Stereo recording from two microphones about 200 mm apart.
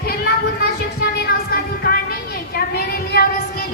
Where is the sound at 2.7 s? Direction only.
50° left (ahead or behind).